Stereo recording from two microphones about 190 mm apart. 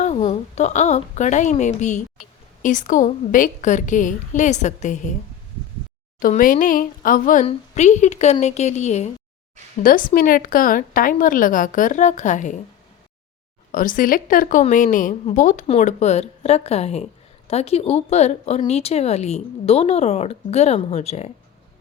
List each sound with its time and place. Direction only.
0.0 s speech: 35° left (ahead or behind)
6.1 s a woman's voice: 45° left (ahead or behind)
9.8 s a woman's voice: 45° left (ahead or behind)
13.7 s a woman's voice: 45° left (ahead or behind)